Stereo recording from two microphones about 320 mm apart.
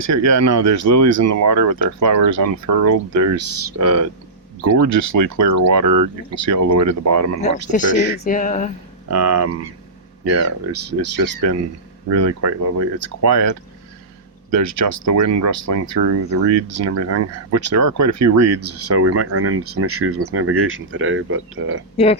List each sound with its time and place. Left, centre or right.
0.0 s speech: right
4.8 s speech: right
7.7 s a sound: left
9.0 s speech: right
10.7 s speech: right
14.5 s speech: right
16.0 s speech: right
21.9 s a sound: centre